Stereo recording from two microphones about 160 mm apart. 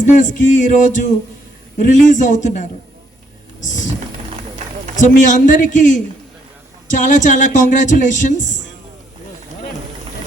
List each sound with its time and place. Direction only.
0.0 s a man's voice: 50° left (ahead or behind)
5.0 s a man's voice: 55° left (ahead or behind)